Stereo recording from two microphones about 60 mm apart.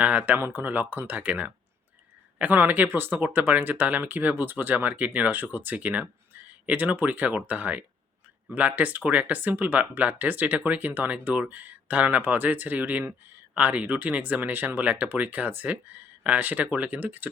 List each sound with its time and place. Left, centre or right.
0.0 s speech: right